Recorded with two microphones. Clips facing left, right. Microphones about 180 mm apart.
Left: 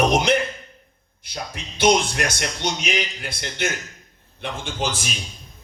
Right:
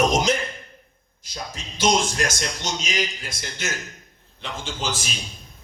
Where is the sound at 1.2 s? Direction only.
60° left (ahead or behind).